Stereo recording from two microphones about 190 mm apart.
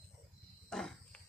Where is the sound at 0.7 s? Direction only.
5° left (ahead or behind).